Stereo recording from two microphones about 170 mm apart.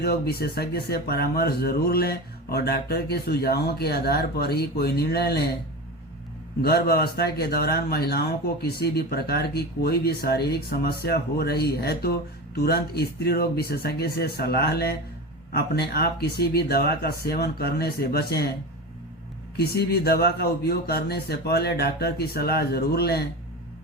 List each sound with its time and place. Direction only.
0.0 s speech: 70° left (ahead or behind)
6.6 s speech: 65° left (ahead or behind)
19.5 s speech: 70° left (ahead or behind)